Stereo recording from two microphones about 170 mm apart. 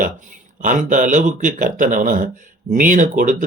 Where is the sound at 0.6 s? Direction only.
50° right (ahead or behind).